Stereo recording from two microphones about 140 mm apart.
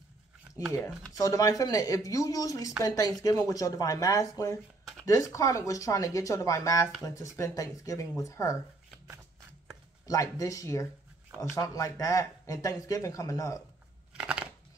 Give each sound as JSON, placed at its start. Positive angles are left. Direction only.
{"t": 1.1, "sound": "speech", "side_deg": 25}
{"t": 10.0, "sound": "speech", "side_deg": 25}
{"t": 14.1, "sound": "a sound", "side_deg": -5}